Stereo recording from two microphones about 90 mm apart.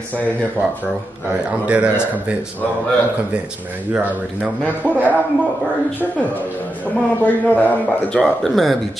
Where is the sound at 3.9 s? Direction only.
15° right (ahead or behind).